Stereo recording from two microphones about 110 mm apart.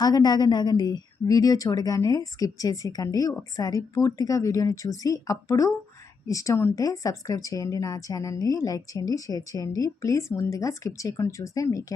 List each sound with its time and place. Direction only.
0.0 s a woman's voice: 35° left (ahead or behind)